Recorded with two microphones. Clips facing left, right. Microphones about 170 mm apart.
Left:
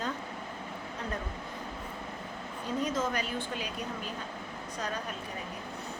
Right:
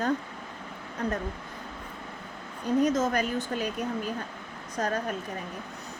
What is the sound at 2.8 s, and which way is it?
Speech, 45° right (ahead or behind).